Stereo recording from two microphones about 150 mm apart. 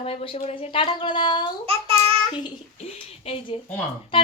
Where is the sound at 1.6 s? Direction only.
40° right (ahead or behind).